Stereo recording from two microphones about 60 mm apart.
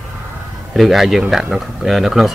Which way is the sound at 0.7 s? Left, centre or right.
Centre.